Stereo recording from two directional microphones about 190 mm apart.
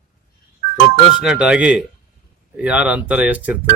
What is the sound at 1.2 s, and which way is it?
Speech, 5° right (ahead or behind).